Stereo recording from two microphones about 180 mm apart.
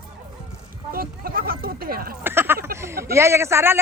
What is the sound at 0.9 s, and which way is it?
Speech, 55° right (ahead or behind).